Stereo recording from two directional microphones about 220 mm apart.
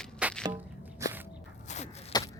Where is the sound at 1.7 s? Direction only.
30° left (ahead or behind).